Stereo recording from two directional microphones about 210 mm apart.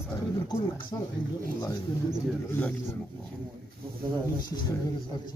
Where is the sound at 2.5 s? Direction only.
10° left (ahead or behind).